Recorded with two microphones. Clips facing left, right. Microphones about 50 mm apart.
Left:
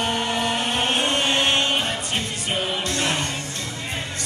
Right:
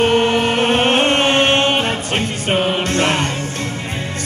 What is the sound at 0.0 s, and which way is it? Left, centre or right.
Music, right.